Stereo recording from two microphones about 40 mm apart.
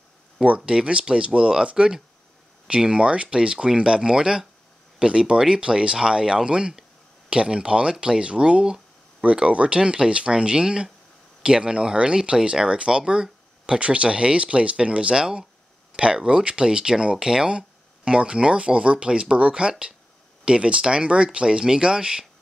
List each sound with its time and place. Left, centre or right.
0.7 s speech: right